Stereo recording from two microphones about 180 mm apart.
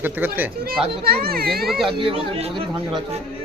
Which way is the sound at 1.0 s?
55° right (ahead or behind).